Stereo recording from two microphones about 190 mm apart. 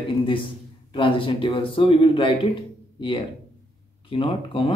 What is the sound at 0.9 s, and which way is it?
Speech, 25° left (ahead or behind).